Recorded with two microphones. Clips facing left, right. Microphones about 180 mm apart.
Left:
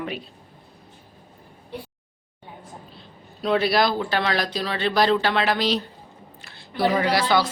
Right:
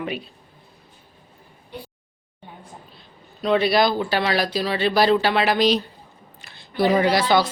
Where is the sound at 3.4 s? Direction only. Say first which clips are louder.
Right 2 dB; centre (ahead or behind).